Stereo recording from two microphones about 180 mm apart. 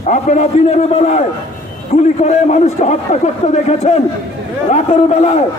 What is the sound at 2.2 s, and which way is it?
A man's voice, 40° left (ahead or behind).